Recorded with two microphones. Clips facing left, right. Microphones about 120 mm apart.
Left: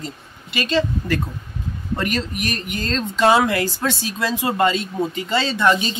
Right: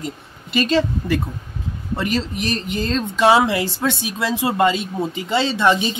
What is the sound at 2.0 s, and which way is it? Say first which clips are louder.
Speech: right 2 dB; 25° right (ahead or behind).